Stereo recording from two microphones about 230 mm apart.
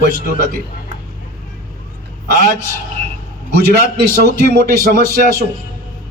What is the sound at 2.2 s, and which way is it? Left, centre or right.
Speech, right.